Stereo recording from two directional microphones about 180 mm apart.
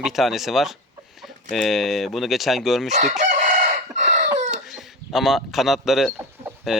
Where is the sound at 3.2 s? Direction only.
40° right (ahead or behind).